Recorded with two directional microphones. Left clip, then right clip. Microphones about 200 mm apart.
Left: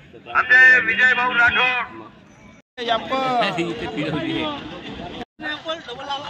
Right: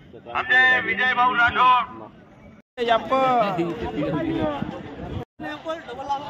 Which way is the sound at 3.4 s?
30° left (ahead or behind).